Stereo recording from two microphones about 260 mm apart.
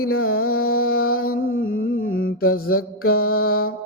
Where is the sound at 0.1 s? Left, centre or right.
Left.